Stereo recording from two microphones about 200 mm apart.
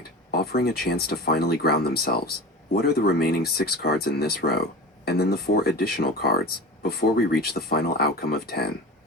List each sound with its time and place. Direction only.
0.3 s speech: 50° left (ahead or behind)